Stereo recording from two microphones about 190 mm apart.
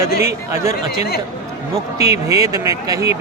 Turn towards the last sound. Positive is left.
turn(degrees=-15)  # may be behind; listen again after turning